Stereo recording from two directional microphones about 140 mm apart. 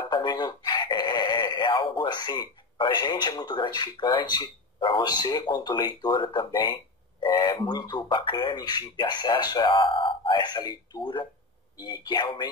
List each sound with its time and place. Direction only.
0.1 s synthetic singing: 30° left (ahead or behind)
2.8 s speech: 35° left (ahead or behind)